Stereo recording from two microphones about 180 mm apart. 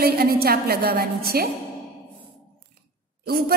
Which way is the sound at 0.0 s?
60° right (ahead or behind).